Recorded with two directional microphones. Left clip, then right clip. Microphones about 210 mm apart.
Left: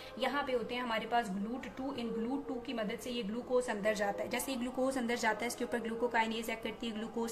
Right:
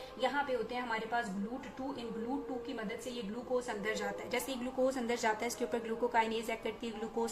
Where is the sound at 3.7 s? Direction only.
25° left (ahead or behind).